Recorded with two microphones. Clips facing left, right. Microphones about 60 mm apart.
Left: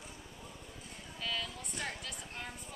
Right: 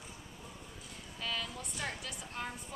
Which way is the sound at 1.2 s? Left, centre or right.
Centre.